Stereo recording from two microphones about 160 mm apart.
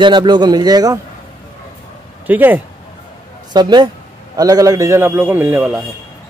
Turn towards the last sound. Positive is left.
turn(degrees=-10)  # may be behind; listen again after turning